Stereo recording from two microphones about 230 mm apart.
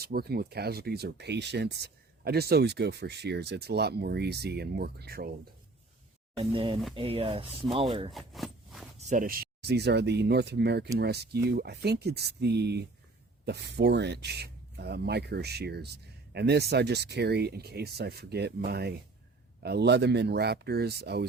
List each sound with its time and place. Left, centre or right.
0.0 s speech: right
6.4 s speech: right
8.1 s a sound: centre
9.0 s speech: right